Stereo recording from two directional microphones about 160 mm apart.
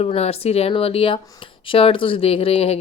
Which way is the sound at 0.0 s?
40° left (ahead or behind).